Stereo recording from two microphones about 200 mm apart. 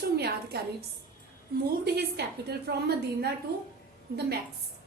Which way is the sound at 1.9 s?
55° right (ahead or behind).